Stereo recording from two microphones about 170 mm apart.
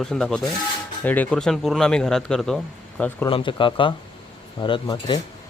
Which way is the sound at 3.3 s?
30° left (ahead or behind).